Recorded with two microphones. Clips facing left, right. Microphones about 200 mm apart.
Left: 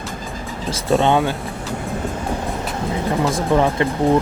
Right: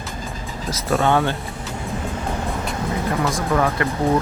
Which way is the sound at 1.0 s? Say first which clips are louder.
Even; 15° left (ahead or behind).